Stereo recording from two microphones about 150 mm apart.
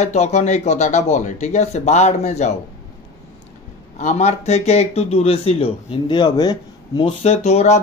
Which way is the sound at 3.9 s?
50° left (ahead or behind).